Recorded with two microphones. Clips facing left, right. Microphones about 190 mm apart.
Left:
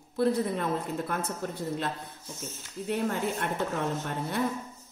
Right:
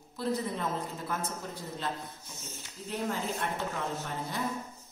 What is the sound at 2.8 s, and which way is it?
Speech, 60° left (ahead or behind).